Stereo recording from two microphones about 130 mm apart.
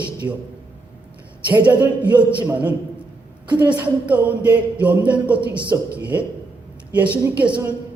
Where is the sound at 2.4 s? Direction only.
10° right (ahead or behind).